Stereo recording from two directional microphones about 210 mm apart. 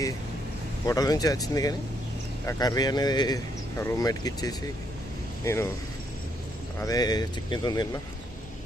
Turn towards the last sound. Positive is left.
turn(degrees=20)  # may be behind; listen again after turning